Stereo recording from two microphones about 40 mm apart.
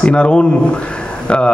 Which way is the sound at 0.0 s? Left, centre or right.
Left.